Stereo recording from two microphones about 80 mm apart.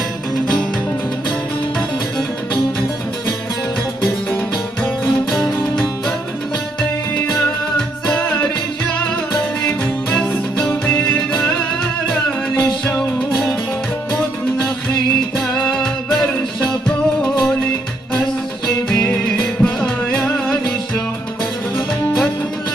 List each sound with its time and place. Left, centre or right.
9.7 s music: centre
12.5 s music: centre
13.3 s music: centre
15.3 s music: centre
18.9 s music: centre